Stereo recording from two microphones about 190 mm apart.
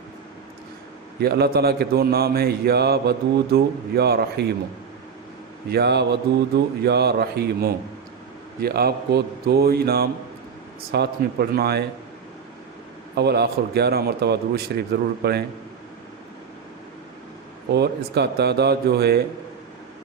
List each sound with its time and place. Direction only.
1.2 s a man's voice: 55° right (ahead or behind)
5.7 s a man's voice: 60° right (ahead or behind)
13.1 s a man's voice: 60° right (ahead or behind)
17.7 s a man's voice: 60° right (ahead or behind)